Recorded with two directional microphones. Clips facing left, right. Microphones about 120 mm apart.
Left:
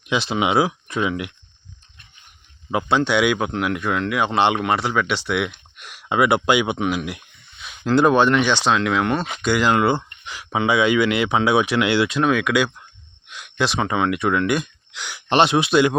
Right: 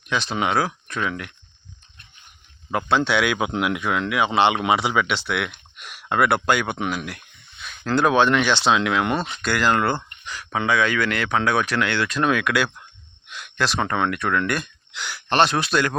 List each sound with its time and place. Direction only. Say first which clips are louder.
0.1 s speech: left 3 dB; 10° left (ahead or behind)
2.6 s speech: left 1 dB; 5° left (ahead or behind)
3.3 s speech: even; 5° right (ahead or behind)
5.0 s speech: left 3 dB; 10° left (ahead or behind)
8.6 s speech: left 1 dB; 5° right (ahead or behind)
9.4 s speech: left 4 dB; 10° left (ahead or behind)
10.5 s speech: left 3 dB; 15° left (ahead or behind)
13.3 s a sound: left 2 dB; 10° left (ahead or behind)
13.7 s speech: left 2 dB; 5° left (ahead or behind)
15.3 s speech: left 3 dB; 20° left (ahead or behind)